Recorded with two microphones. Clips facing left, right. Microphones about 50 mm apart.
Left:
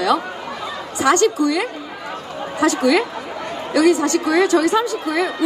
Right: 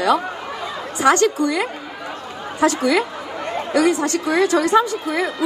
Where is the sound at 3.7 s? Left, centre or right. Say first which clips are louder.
Left 3 dB; right.